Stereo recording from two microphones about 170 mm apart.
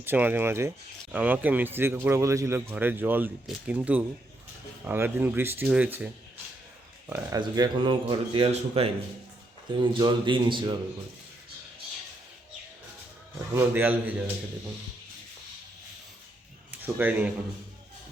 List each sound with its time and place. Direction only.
0.0 s speech: 10° right (ahead or behind)
7.1 s speech: 20° right (ahead or behind)
13.5 s speech: 15° right (ahead or behind)
16.7 s speech: 10° right (ahead or behind)